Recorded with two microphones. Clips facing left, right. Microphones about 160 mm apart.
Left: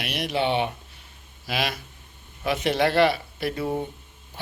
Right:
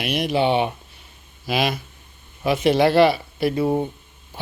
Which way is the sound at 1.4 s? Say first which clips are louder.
Right 6 dB; 20° right (ahead or behind).